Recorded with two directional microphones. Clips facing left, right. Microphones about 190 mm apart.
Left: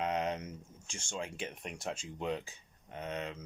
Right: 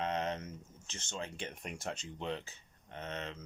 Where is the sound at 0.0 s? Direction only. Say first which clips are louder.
Left 2 dB; 10° left (ahead or behind).